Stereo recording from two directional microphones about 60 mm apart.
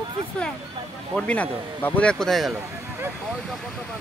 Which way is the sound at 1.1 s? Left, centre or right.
Left.